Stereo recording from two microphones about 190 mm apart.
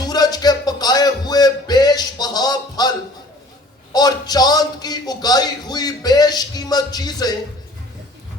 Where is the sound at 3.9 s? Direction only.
20° left (ahead or behind).